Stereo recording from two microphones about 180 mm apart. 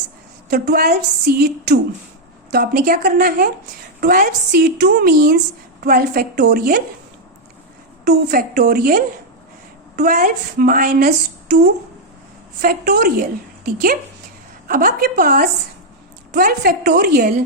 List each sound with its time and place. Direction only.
0.5 s a woman's voice: 60° right (ahead or behind)
4.6 s a woman's voice: 60° right (ahead or behind)
8.0 s a woman's voice: 55° right (ahead or behind)